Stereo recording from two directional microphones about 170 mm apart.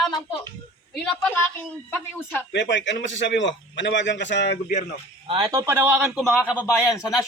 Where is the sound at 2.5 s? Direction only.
90° left.